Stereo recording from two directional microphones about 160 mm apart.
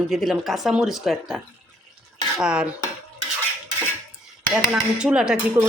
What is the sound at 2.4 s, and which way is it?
Speech, 5° right (ahead or behind).